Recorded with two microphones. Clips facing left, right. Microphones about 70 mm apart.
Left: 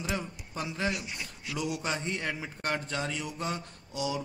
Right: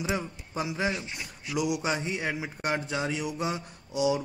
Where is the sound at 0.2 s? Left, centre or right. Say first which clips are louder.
Right 4 dB; centre.